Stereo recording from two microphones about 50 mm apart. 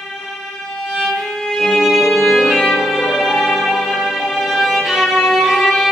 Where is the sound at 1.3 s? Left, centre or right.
Centre.